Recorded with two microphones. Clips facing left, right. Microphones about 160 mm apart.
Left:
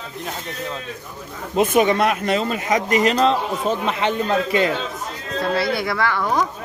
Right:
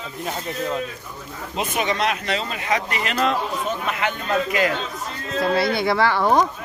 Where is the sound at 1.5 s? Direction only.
50° left (ahead or behind); by 4.1 s 30° left (ahead or behind).